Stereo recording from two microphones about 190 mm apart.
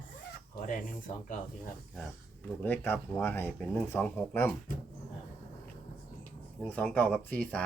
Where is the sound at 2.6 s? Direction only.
10° left (ahead or behind).